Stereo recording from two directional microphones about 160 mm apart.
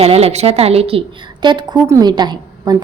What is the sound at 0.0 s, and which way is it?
A woman's voice, 40° right (ahead or behind).